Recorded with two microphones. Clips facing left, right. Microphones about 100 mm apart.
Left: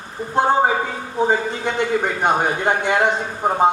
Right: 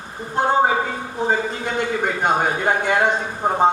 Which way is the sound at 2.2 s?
20° left (ahead or behind).